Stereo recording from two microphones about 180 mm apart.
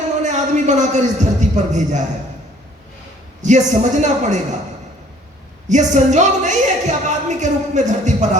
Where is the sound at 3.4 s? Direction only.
40° right (ahead or behind).